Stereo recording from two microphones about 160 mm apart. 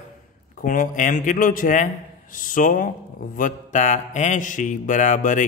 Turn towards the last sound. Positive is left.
turn(degrees=50)  # may be behind; listen again after turning